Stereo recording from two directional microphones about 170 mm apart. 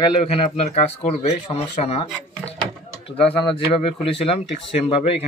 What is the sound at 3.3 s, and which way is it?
Speech, 30° left (ahead or behind).